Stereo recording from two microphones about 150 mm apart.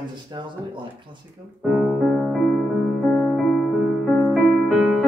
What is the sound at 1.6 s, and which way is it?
Music, 5° right (ahead or behind).